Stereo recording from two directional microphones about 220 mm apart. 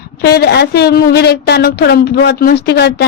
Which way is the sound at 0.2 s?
45° left (ahead or behind).